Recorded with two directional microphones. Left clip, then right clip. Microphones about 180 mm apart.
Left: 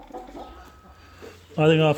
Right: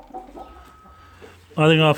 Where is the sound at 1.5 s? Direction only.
20° right (ahead or behind).